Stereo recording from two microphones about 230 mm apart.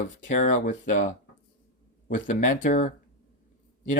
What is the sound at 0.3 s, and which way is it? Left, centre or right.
Speech, left.